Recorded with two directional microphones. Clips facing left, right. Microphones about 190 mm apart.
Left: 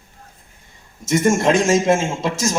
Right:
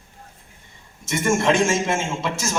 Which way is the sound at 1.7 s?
40° left (ahead or behind).